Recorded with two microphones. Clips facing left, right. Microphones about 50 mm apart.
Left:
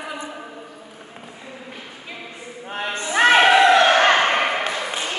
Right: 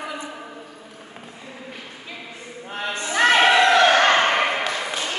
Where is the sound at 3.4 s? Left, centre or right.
Centre.